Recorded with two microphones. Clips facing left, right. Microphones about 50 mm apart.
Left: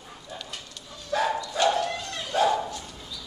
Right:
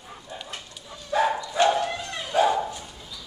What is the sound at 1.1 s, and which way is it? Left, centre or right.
Dog, centre.